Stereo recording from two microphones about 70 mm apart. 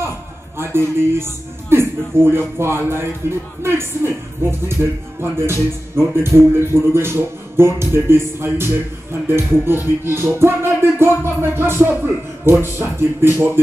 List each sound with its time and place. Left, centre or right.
0.6 s speech: right